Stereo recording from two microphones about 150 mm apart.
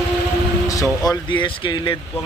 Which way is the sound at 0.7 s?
20° left (ahead or behind).